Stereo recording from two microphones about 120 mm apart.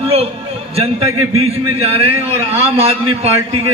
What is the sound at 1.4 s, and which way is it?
A man's voice, 55° right (ahead or behind).